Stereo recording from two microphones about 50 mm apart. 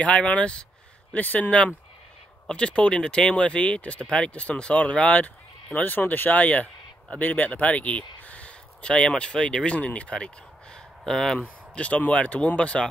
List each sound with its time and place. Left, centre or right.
0.0 s speech: left
1.1 s speech: left